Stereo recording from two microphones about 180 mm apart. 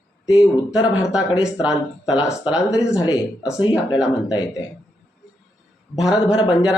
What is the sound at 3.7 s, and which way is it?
Speech, 5° right (ahead or behind).